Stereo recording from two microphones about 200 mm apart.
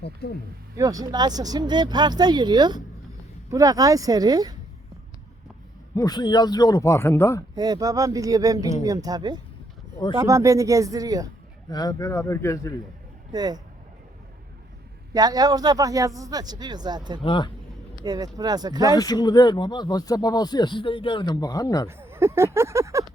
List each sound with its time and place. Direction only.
0.0 s speech: 55° left (ahead or behind)
0.8 s speech: 15° right (ahead or behind)
5.9 s speech: 20° left (ahead or behind)
7.5 s speech: 20° right (ahead or behind)
11.7 s speech: 20° left (ahead or behind)
13.3 s speech: 20° right (ahead or behind)
15.1 s speech: 20° right (ahead or behind)
17.2 s speech: 25° left (ahead or behind)
18.0 s speech: 20° right (ahead or behind)
18.9 s speech: 20° left (ahead or behind)
21.8 s speech: 10° right (ahead or behind)